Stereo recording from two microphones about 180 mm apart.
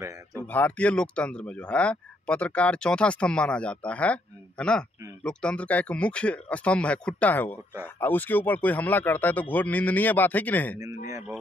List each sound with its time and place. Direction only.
0.0 s speech: 15° right (ahead or behind)
0.4 s speech: 10° left (ahead or behind)